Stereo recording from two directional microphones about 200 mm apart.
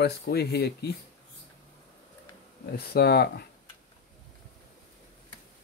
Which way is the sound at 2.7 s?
50° left (ahead or behind).